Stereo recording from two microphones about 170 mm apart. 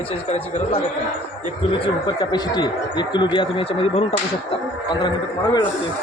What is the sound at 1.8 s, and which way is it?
Speech, 25° left (ahead or behind).